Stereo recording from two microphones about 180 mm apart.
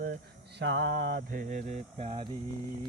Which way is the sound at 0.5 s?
85° right.